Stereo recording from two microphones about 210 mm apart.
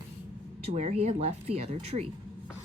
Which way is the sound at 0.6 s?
30° right (ahead or behind).